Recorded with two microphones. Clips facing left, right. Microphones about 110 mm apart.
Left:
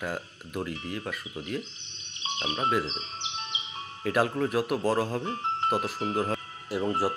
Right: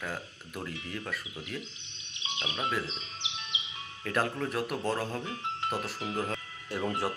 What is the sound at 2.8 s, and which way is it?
Music, 35° left (ahead or behind).